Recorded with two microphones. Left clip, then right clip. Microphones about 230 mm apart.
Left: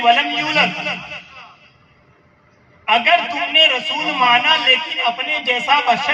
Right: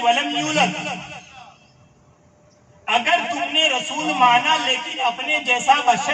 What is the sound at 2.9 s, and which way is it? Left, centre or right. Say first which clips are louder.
A man's voice: left 4 dB; right.